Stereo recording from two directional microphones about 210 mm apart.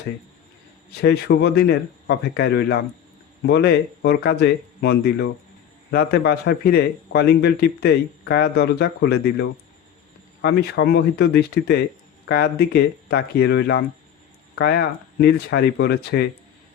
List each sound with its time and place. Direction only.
1.0 s a man's voice: 50° left (ahead or behind)